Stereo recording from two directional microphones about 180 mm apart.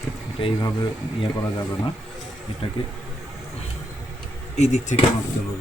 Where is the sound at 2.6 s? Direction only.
30° left (ahead or behind).